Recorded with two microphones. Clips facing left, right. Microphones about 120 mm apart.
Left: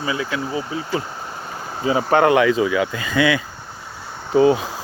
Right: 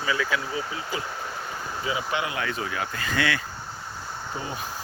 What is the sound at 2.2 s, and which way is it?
Speech, 65° left (ahead or behind).